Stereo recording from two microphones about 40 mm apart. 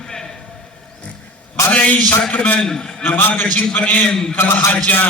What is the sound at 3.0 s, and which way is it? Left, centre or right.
A man's voice, left.